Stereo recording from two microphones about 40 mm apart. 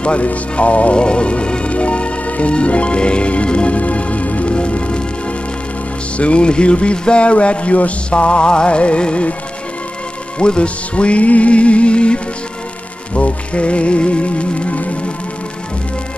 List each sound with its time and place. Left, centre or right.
0.0 s music: left
6.1 s speech: left
10.4 s speech: left
13.1 s music: left